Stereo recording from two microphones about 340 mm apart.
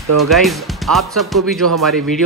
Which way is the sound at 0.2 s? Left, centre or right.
Centre.